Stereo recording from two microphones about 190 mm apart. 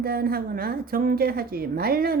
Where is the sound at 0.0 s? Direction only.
50° right (ahead or behind).